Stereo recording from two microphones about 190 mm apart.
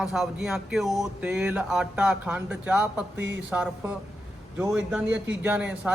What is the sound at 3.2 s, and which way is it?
Speech, 70° right (ahead or behind).